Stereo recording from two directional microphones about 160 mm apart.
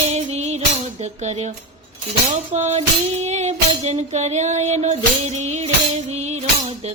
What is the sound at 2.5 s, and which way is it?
Music, 45° right (ahead or behind).